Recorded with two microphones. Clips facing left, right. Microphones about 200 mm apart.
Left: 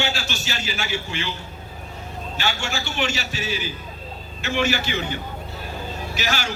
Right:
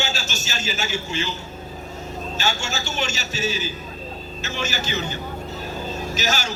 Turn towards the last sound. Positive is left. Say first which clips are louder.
# right 1 dB
turn(degrees=-45)  # may be behind; listen again after turning